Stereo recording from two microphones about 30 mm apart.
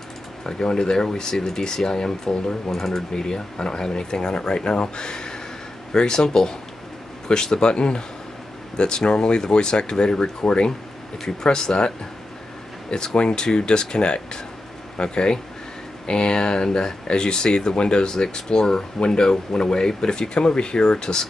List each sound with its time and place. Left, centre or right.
0.4 s speech: left
11.5 s speech: left
12.9 s speech: left